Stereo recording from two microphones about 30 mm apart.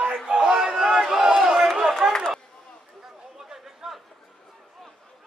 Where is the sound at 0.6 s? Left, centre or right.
Centre.